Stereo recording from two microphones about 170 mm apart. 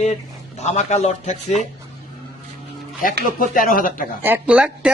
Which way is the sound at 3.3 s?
55° left (ahead or behind).